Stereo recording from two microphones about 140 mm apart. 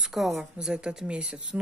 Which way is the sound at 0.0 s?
Centre (ahead or behind).